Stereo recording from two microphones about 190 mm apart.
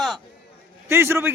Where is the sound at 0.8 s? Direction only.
15° right (ahead or behind).